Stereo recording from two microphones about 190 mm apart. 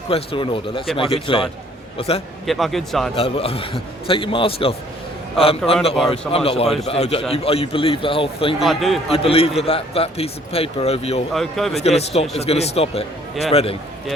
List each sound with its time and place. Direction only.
0.1 s a man's voice: 30° left (ahead or behind)
2.5 s speech: centre (ahead or behind)
3.2 s a man's voice: 30° left (ahead or behind)
8.5 s speech: centre (ahead or behind)
9.1 s a man's voice: 30° left (ahead or behind)
11.3 s speech: centre (ahead or behind)
11.8 s a man's voice: 35° left (ahead or behind)